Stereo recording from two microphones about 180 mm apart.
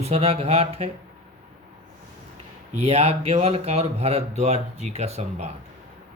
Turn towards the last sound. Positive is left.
turn(degrees=-35)  # may be behind; listen again after turning